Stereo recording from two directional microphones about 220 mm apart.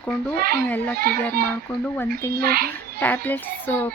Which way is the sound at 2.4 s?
45° right (ahead or behind).